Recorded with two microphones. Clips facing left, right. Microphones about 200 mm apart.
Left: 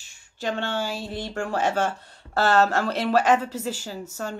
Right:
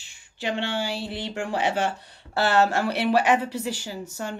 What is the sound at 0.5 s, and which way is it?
Speech, 45° left (ahead or behind).